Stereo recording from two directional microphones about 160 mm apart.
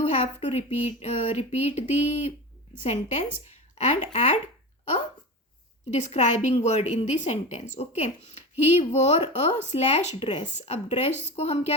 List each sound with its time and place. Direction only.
0.0 s speech: 45° left (ahead or behind)
5.9 s speech: 45° left (ahead or behind)